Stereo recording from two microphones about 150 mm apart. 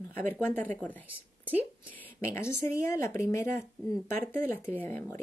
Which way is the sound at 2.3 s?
15° left (ahead or behind).